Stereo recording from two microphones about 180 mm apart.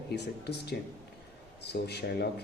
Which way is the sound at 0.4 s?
65° left (ahead or behind).